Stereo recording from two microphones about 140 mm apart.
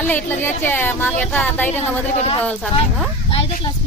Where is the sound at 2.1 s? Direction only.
45° left (ahead or behind).